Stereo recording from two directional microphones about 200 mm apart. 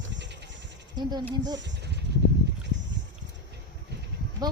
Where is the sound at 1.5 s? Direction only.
60° right (ahead or behind).